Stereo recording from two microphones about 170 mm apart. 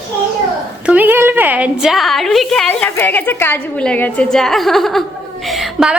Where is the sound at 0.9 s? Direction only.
10° right (ahead or behind).